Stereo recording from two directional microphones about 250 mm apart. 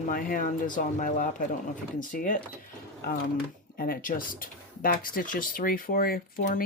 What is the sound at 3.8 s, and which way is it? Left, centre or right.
Speech, left.